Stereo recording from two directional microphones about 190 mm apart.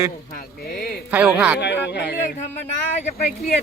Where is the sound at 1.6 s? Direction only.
65° left (ahead or behind).